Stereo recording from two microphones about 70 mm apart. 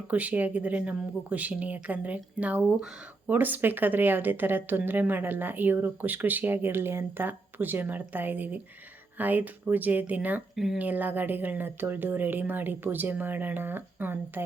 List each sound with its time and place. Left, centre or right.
0.1 s speech: right
10.5 s speech: centre
10.8 s speech: right